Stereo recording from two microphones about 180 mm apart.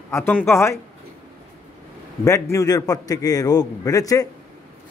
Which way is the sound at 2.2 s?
15° left (ahead or behind).